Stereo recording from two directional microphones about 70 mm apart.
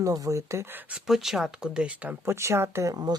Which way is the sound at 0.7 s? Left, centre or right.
Right.